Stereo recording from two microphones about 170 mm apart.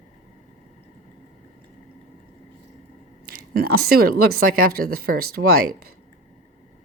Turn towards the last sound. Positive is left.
turn(degrees=-65)  # may be behind; listen again after turning